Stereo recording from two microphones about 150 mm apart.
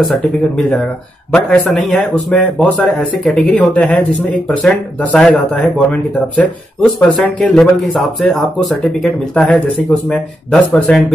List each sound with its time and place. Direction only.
1.3 s speech: 5° left (ahead or behind)